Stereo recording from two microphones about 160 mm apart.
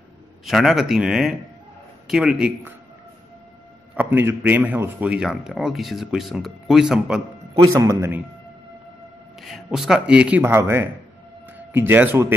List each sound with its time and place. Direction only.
0.5 s a man's voice: centre (ahead or behind)
3.9 s a man's voice: 10° right (ahead or behind)
7.5 s speech: 20° right (ahead or behind)
9.4 s a man's voice: centre (ahead or behind)